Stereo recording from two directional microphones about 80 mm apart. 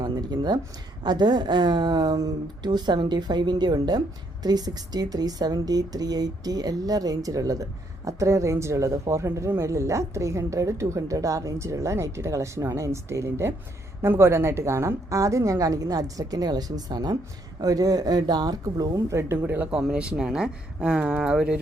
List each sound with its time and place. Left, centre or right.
0.0 s a sound: right
1.0 s a woman's voice: right
19.4 s speech: right
19.7 s speech: centre